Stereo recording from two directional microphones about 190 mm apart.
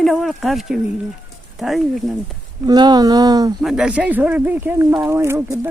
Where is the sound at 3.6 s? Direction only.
Centre (ahead or behind).